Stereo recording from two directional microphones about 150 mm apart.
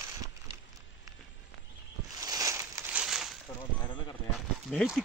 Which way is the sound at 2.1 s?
25° right (ahead or behind).